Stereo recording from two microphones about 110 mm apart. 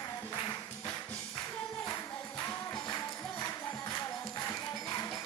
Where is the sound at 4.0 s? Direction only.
35° left (ahead or behind).